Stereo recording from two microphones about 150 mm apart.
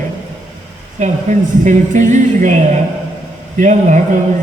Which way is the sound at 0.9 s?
55° right (ahead or behind).